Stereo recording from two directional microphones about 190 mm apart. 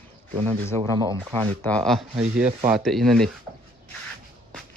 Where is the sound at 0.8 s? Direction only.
25° right (ahead or behind).